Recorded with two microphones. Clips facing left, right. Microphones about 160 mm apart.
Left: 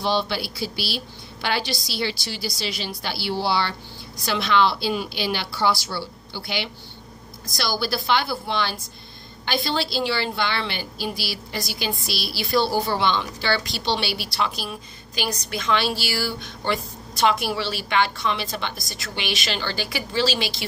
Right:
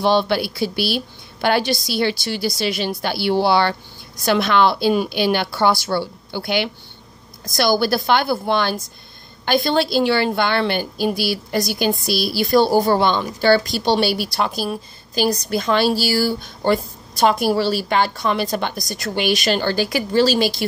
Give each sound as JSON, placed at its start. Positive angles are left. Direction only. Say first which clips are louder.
{"t": 0.0, "sound": "a woman's voice", "louder": "right 7 dB", "side_deg": -55}